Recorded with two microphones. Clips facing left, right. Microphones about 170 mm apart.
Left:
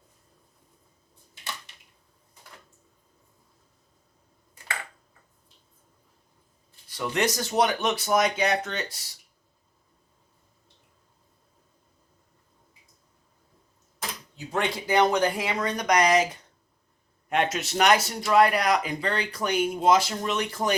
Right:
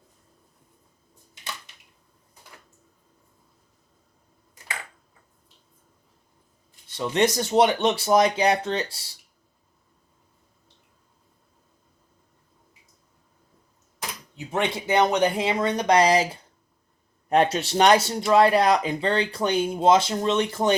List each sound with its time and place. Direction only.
6.8 s speech: 25° right (ahead or behind)
14.3 s speech: 20° right (ahead or behind)